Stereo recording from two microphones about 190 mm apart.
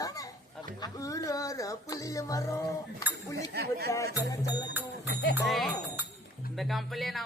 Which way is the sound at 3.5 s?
60° right (ahead or behind).